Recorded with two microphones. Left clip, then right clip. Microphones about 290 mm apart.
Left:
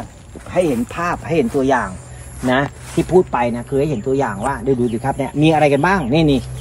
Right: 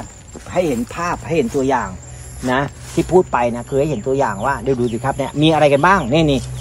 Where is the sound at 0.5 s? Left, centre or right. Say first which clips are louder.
Left 1 dB; centre.